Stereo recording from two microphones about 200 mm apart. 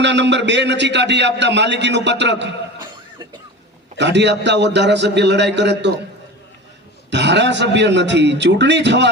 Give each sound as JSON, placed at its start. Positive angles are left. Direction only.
{"t": 0.0, "sound": "a man's voice", "side_deg": -60}
{"t": 3.9, "sound": "a man's voice", "side_deg": -60}
{"t": 7.1, "sound": "a man's voice", "side_deg": -60}